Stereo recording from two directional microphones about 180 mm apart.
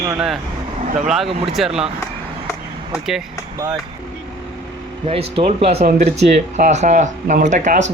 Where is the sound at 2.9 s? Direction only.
Centre (ahead or behind).